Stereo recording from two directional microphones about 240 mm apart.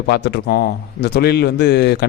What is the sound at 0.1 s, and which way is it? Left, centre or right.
A man's voice, left.